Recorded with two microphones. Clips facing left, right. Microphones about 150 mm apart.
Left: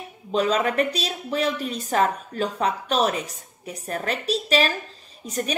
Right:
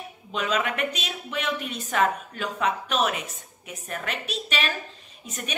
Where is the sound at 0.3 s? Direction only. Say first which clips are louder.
Left 5 dB; 35° left (ahead or behind).